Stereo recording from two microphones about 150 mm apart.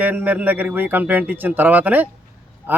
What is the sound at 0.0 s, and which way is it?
Speech, 10° right (ahead or behind).